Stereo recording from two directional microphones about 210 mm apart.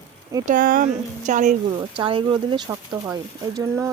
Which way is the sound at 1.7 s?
25° right (ahead or behind).